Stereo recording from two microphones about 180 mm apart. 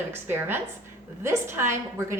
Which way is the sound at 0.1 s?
10° right (ahead or behind).